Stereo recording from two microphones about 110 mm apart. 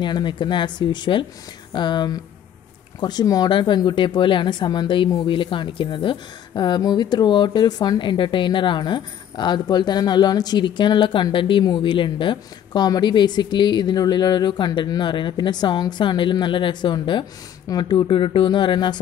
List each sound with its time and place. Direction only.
0.0 s speech: 45° left (ahead or behind)